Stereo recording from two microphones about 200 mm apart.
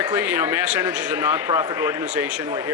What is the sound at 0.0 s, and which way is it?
A man's voice, 10° right (ahead or behind).